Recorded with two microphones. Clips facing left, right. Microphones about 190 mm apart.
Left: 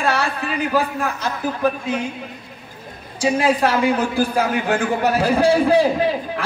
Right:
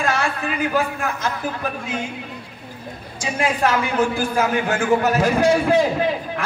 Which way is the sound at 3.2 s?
35° left (ahead or behind).